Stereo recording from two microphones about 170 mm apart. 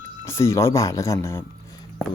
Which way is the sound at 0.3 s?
15° left (ahead or behind).